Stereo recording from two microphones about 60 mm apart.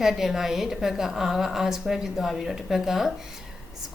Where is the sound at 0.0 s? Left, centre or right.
Centre.